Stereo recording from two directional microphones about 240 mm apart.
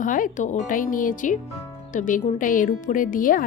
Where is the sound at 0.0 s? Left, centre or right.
Left.